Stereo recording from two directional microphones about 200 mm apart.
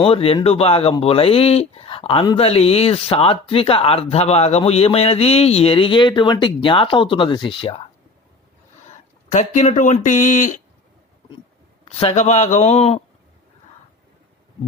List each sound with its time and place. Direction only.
0.0 s speech: 30° left (ahead or behind)
9.3 s speech: 35° left (ahead or behind)
11.9 s speech: 30° left (ahead or behind)